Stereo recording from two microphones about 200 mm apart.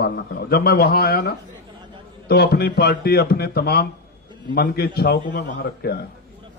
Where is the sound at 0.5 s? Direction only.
50° left (ahead or behind).